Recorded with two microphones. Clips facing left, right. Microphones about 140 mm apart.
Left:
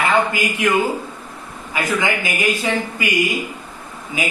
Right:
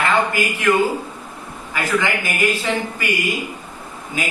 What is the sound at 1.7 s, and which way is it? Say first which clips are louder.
Speech: even; 15° left (ahead or behind).